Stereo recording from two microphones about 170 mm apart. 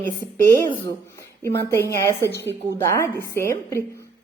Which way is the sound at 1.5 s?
15° left (ahead or behind).